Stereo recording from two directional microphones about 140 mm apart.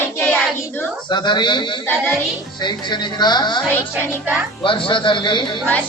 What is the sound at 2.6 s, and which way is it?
A man's voice, 30° left (ahead or behind).